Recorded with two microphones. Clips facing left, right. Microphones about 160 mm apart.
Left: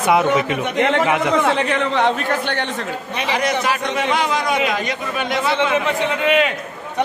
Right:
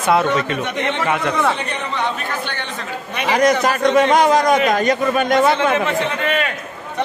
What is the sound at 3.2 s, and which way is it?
A man's voice, 45° right (ahead or behind).